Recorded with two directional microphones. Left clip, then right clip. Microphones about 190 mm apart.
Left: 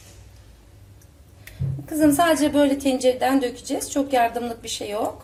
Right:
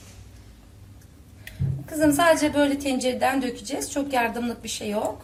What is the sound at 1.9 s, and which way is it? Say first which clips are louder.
A woman's voice: left 1 dB; 25° left (ahead or behind).